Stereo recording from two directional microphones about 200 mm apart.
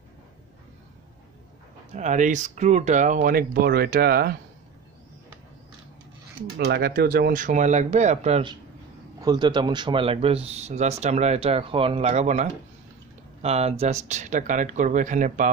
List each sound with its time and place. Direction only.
2.0 s speech: 40° right (ahead or behind)
6.6 s speech: 50° right (ahead or behind)